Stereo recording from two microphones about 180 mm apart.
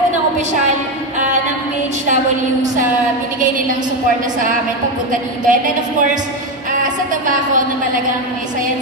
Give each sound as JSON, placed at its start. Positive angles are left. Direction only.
{"t": 5.1, "sound": "a woman's voice", "side_deg": -45}
{"t": 7.2, "sound": "a woman's voice", "side_deg": -45}